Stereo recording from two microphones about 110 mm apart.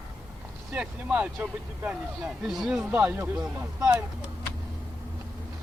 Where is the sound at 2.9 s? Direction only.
15° right (ahead or behind).